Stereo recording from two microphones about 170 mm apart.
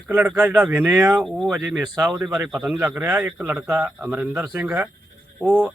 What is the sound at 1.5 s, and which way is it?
A man's voice, 20° right (ahead or behind).